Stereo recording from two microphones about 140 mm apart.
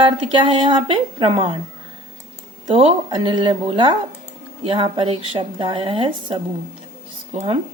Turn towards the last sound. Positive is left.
turn(degrees=-45)  # may be behind; listen again after turning